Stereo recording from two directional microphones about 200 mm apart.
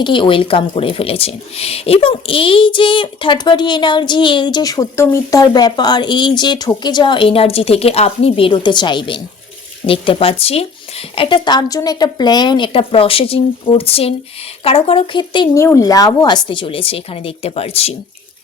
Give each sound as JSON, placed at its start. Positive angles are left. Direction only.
{"t": 0.0, "sound": "speech", "side_deg": 25}